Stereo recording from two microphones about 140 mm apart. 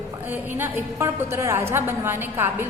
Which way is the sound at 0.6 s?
20° right (ahead or behind).